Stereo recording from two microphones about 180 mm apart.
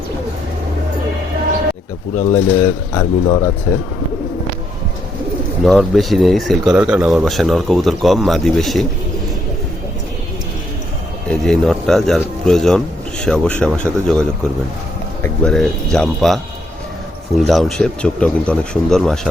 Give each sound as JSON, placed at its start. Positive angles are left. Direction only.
{"t": 2.1, "sound": "speech", "side_deg": 15}
{"t": 5.6, "sound": "speech", "side_deg": 0}
{"t": 11.3, "sound": "speech", "side_deg": 5}